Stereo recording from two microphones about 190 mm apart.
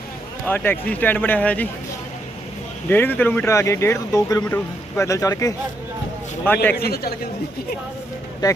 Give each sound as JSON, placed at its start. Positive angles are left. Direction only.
{"t": 0.4, "sound": "speech", "side_deg": 10}
{"t": 2.9, "sound": "speech", "side_deg": 10}
{"t": 6.7, "sound": "a man's voice", "side_deg": 55}
{"t": 8.4, "sound": "speech", "side_deg": 20}